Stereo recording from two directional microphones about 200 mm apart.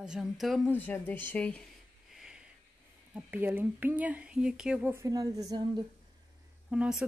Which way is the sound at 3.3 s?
10° right (ahead or behind).